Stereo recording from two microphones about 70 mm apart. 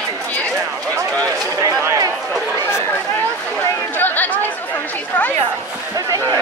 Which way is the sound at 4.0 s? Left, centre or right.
Left.